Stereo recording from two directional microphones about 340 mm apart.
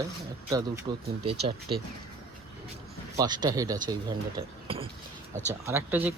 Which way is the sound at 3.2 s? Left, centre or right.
Centre.